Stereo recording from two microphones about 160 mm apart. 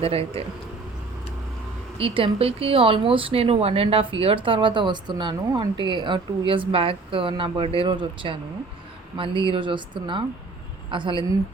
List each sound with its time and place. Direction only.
0.0 s speech: 40° right (ahead or behind)
2.0 s speech: 35° right (ahead or behind)